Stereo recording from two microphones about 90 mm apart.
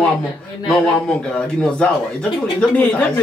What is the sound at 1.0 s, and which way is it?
A woman's voice, 10° left (ahead or behind).